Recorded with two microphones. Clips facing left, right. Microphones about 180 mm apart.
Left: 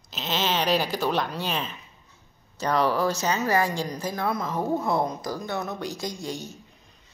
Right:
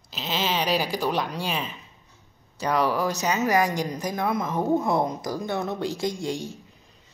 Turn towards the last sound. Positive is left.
turn(degrees=-25)  # may be behind; listen again after turning